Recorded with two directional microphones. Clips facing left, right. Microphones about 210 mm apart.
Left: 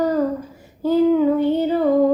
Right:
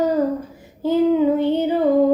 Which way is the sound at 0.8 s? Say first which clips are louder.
Left 1 dB; 20° right (ahead or behind).